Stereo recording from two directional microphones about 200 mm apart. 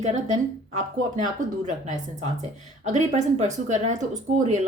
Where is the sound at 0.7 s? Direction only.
40° right (ahead or behind).